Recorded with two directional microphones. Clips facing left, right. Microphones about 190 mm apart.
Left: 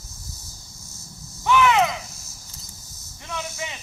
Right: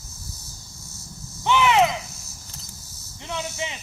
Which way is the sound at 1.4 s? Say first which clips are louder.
Even; 20° right (ahead or behind).